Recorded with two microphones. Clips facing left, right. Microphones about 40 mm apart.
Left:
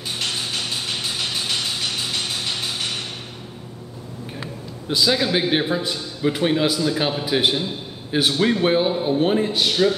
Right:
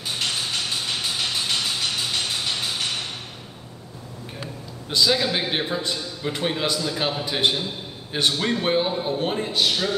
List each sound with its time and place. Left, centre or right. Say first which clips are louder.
0.2 s music: even; centre
4.8 s a man's voice: left 1 dB; centre